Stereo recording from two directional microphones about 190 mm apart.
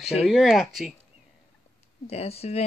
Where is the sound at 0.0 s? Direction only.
35° left (ahead or behind).